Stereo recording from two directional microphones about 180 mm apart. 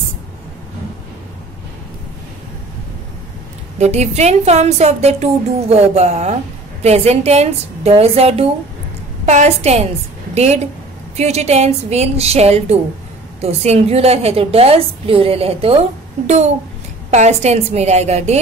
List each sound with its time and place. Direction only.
3.7 s a woman's voice: 40° right (ahead or behind)